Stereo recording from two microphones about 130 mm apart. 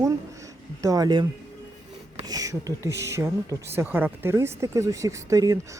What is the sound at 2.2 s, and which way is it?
Speech, 30° right (ahead or behind).